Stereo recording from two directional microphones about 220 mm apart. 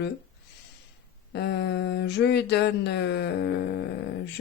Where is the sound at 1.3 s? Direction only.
50° left (ahead or behind).